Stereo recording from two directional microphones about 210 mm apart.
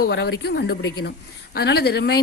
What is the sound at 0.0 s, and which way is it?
A woman's voice, 55° left (ahead or behind).